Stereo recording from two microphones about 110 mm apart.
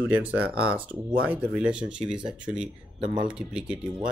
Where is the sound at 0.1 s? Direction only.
15° right (ahead or behind).